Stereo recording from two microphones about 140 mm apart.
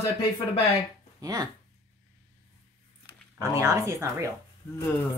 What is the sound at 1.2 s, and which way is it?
Speech, 30° right (ahead or behind).